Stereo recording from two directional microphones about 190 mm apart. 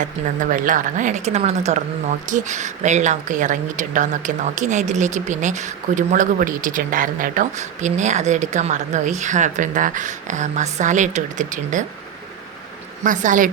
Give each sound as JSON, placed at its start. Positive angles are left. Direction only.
{"t": 0.5, "sound": "speech", "side_deg": -45}
{"t": 13.1, "sound": "speech", "side_deg": -40}